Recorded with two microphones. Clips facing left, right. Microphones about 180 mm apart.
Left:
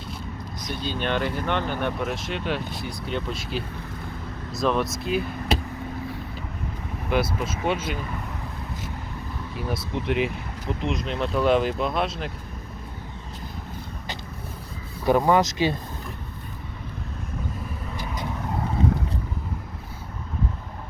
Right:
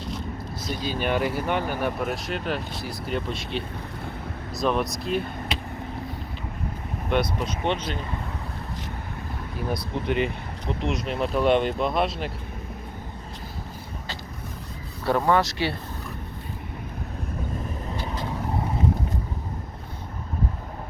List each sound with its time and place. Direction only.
0.8 s speech: 10° right (ahead or behind)
7.1 s speech: 5° left (ahead or behind)
9.6 s speech: centre (ahead or behind)
15.0 s speech: 15° left (ahead or behind)